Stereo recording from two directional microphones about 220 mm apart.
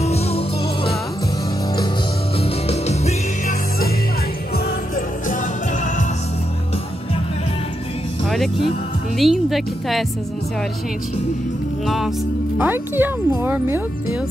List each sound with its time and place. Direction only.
0.0 s music: 30° left (ahead or behind)
2.4 s music: 30° left (ahead or behind)
4.6 s music: 40° left (ahead or behind)
8.3 s music: centre (ahead or behind)
9.2 s a woman's voice: centre (ahead or behind)
11.8 s a woman's voice: centre (ahead or behind)